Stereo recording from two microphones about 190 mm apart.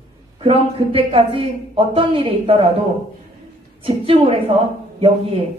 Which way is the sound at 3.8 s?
30° right (ahead or behind).